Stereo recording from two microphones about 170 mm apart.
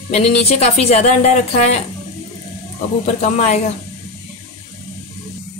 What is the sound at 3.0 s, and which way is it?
Speech, 40° left (ahead or behind).